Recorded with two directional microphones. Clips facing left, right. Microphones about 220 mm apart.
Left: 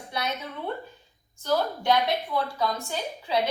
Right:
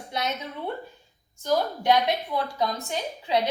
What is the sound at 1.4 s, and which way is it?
A woman's voice, 15° right (ahead or behind).